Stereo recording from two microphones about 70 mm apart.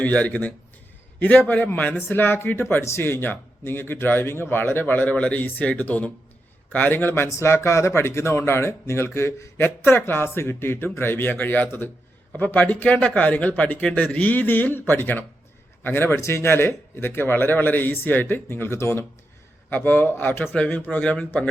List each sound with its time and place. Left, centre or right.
0.0 s speech: centre
7.3 s speech: left
20.5 s speech: left